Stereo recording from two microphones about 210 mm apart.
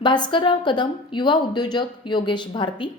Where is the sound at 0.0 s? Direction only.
20° left (ahead or behind).